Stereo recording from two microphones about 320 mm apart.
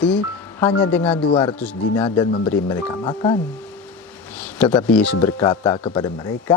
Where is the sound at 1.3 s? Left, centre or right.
Centre.